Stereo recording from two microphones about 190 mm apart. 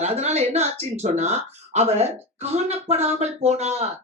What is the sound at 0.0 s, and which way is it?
Speech, 35° right (ahead or behind).